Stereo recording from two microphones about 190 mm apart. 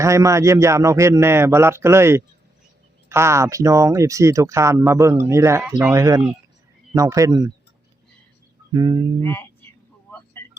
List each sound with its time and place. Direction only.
0.0 s a man's voice: 15° right (ahead or behind)
8.7 s a man's voice: 20° right (ahead or behind)
9.2 s a sound: 10° left (ahead or behind)